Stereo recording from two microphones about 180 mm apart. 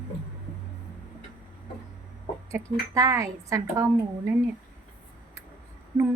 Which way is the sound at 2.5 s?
15° right (ahead or behind).